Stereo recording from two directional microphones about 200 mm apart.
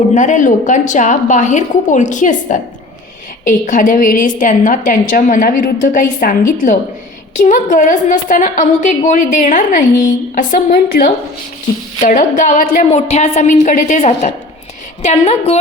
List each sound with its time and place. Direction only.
0.1 s a woman's voice: 40° left (ahead or behind)